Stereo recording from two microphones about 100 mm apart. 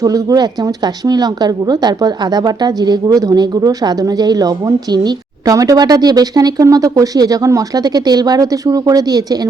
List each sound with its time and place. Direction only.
0.0 s speech: 35° right (ahead or behind)